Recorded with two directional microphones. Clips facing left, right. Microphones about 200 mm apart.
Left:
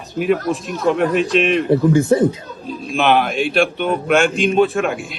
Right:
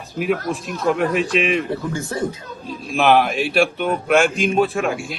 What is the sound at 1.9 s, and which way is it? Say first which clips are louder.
Speech: left 12 dB; 20° left (ahead or behind).